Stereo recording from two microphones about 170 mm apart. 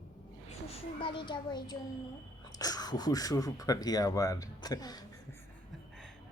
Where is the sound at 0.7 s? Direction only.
30° left (ahead or behind).